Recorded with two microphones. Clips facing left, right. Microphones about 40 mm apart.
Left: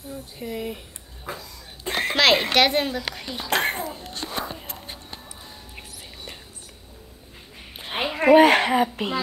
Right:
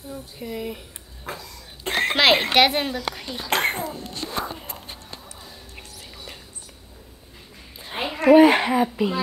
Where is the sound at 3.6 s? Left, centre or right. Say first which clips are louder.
Right 1 dB; right.